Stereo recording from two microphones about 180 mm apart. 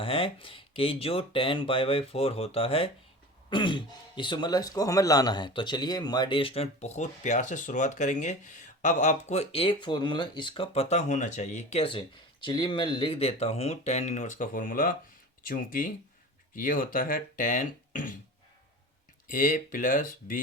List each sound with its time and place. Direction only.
0.0 s speech: 30° left (ahead or behind); by 18.1 s 45° left (ahead or behind)
19.3 s speech: 50° left (ahead or behind)